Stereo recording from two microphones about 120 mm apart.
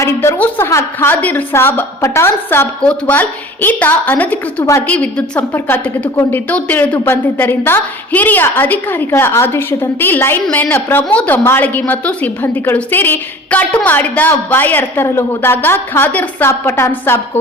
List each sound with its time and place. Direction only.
0.0 s a woman's voice: 25° left (ahead or behind)